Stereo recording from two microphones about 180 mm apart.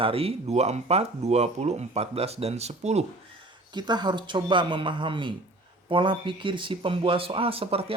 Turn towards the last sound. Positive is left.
turn(degrees=-30)  # may be behind; listen again after turning